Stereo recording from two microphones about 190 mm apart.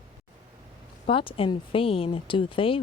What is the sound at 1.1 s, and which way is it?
A woman's voice, 25° left (ahead or behind).